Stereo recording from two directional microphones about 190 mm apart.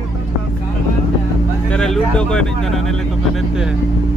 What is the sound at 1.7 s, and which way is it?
Speech, 5° left (ahead or behind).